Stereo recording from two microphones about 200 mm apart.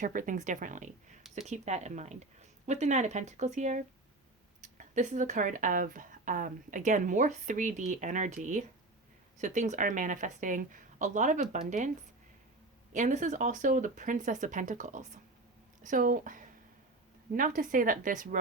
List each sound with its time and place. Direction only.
0.0 s speech: 40° right (ahead or behind)
12.9 s a woman's voice: 40° right (ahead or behind)